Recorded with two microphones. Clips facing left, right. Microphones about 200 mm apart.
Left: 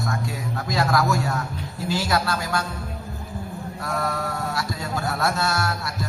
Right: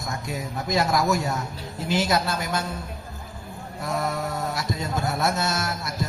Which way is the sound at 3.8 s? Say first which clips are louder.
Right 1 dB; 20° right (ahead or behind).